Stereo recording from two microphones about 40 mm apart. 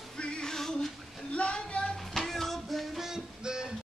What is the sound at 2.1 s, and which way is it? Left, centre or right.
Music, centre.